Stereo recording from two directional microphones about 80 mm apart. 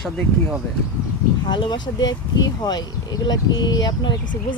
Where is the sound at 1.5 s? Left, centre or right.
Left.